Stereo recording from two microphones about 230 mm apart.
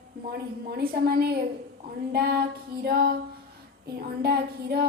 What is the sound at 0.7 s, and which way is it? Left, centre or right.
A woman's voice, right.